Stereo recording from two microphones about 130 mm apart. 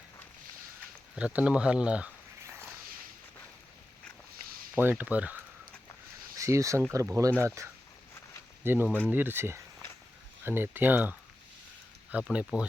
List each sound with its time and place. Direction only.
1.1 s speech: 10° right (ahead or behind)
4.8 s speech: 15° right (ahead or behind)
6.3 s speech: 25° right (ahead or behind)